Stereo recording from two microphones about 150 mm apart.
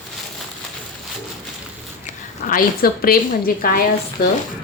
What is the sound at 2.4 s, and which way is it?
A woman's voice, 75° left (ahead or behind).